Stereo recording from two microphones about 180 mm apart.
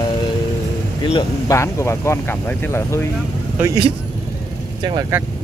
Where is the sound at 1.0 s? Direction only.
20° left (ahead or behind).